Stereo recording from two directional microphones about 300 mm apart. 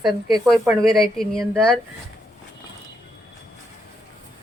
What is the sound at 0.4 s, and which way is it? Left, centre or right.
Speech, centre.